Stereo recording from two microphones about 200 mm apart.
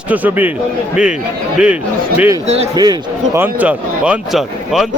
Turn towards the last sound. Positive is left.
turn(degrees=-5)  # may be behind; listen again after turning